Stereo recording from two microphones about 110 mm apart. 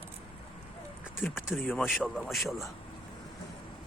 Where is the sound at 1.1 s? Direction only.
20° left (ahead or behind).